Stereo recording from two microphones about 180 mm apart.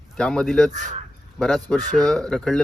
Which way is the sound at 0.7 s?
45° right (ahead or behind).